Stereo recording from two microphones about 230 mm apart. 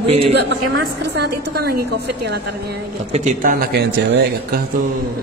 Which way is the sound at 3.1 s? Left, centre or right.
Right.